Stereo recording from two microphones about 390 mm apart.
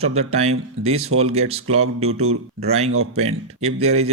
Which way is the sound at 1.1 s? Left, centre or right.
Right.